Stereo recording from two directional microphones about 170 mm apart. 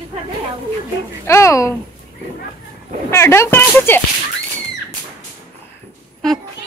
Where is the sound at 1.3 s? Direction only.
15° left (ahead or behind).